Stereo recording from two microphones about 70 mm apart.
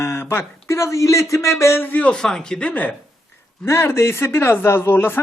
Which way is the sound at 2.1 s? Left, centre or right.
Centre.